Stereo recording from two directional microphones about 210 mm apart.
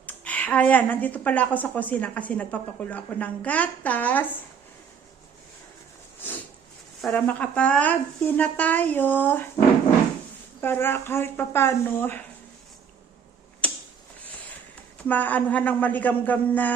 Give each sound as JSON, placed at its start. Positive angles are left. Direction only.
{"t": 0.0, "sound": "a woman's voice", "side_deg": 5}
{"t": 7.0, "sound": "a woman's voice", "side_deg": 5}
{"t": 10.6, "sound": "a woman's voice", "side_deg": 10}
{"t": 15.0, "sound": "a woman's voice", "side_deg": 10}